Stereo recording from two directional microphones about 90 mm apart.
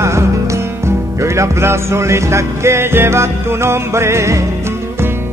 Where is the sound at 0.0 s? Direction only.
30° right (ahead or behind).